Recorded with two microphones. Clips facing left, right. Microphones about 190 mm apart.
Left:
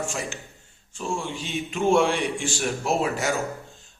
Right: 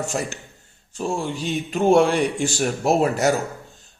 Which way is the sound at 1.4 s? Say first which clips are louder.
Right 5 dB; 40° right (ahead or behind).